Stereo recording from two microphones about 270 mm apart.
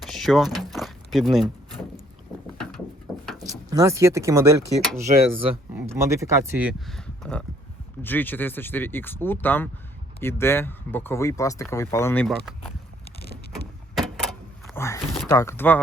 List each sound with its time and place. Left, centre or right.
0.0 s a sound: centre
3.3 s speech: centre
13.1 s vehicle: left
13.9 s vehicle: centre
14.8 s a sound: centre
15.3 s speech: centre